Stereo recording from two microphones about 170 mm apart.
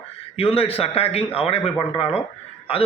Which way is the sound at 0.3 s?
35° left (ahead or behind).